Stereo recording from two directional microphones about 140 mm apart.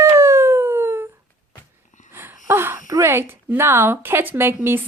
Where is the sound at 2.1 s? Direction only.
15° right (ahead or behind).